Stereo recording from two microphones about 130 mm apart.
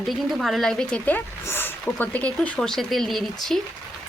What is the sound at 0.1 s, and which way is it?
Speech, centre (ahead or behind).